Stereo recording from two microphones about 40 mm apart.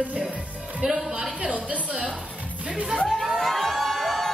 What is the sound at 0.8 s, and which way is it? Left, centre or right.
Speech, centre.